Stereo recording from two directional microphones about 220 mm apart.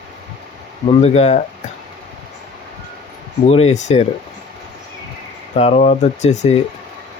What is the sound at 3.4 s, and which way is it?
Speech, 30° left (ahead or behind).